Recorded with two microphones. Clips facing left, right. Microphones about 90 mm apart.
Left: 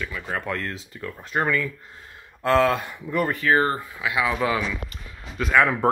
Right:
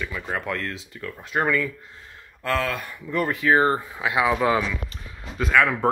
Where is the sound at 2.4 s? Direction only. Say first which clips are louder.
Left 6 dB; 25° left (ahead or behind).